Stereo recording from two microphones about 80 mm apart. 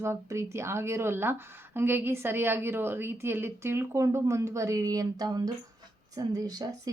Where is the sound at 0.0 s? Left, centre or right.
Right.